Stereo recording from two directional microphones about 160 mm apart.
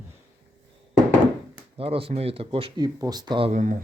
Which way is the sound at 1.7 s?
35° right (ahead or behind).